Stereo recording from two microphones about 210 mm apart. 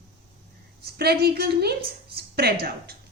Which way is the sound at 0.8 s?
50° right (ahead or behind).